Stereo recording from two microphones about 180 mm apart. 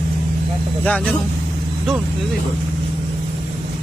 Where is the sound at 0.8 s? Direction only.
5° left (ahead or behind).